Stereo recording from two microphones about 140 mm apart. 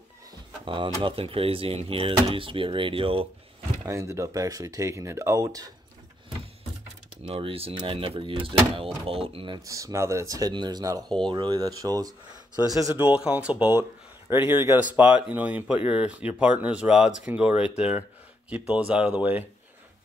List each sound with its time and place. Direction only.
0.7 s speech: 35° right (ahead or behind)
3.8 s speech: 20° right (ahead or behind)
7.2 s speech: 40° right (ahead or behind)
9.7 s speech: 25° right (ahead or behind)
13.0 s speech: 10° right (ahead or behind)